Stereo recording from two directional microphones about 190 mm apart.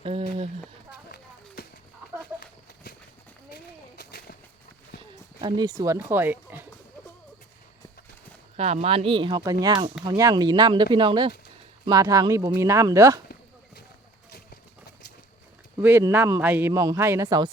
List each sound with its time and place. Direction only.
0.0 s a sound: 30° right (ahead or behind)
3.5 s a sound: 60° left (ahead or behind)
5.4 s speech: 25° right (ahead or behind)
8.5 s a man's voice: 35° right (ahead or behind); by 13.2 s 15° right (ahead or behind)
14.3 s clip-clop: 60° left (ahead or behind)
15.8 s a man's voice: 10° right (ahead or behind)